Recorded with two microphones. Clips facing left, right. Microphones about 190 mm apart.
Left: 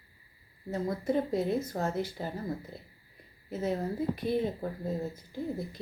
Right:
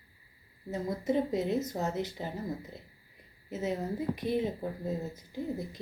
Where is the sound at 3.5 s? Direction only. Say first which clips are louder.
Left 1 dB; 20° right (ahead or behind).